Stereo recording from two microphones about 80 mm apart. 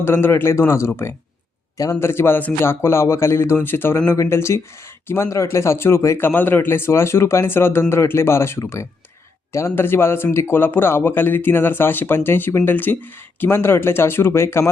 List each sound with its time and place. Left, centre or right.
0.0 s a man's voice: left